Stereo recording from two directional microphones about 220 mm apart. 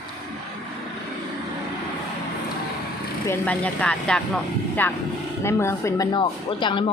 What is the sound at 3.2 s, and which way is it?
Speech, 10° left (ahead or behind).